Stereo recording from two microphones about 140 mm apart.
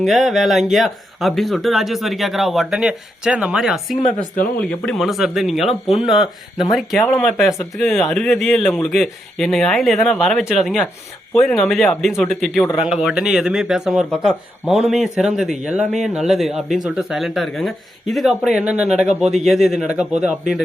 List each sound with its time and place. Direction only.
0.0 s speech: centre (ahead or behind)
4.0 s speech: 65° left (ahead or behind)
4.5 s speech: 5° left (ahead or behind)